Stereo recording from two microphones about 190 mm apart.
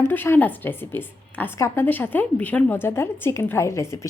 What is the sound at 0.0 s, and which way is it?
A woman's voice, 10° left (ahead or behind).